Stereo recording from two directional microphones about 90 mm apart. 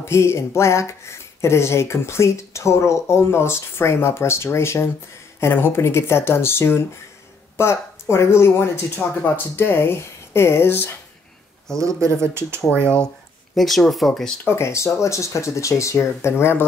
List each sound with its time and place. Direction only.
0.0 s speech: 30° left (ahead or behind)
11.8 s speech: 35° right (ahead or behind)
12.8 s speech: 15° left (ahead or behind)
13.6 s speech: centre (ahead or behind)
14.4 s speech: 30° left (ahead or behind)